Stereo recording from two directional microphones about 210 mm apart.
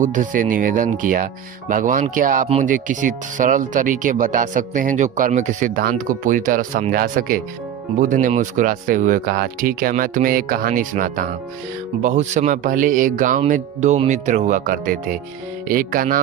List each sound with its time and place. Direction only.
0.0 s speech: 35° right (ahead or behind)